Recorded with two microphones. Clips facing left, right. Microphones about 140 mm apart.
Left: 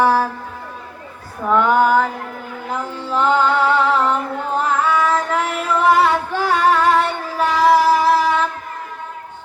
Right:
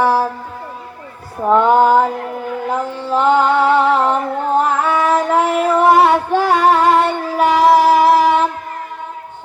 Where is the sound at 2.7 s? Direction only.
25° right (ahead or behind).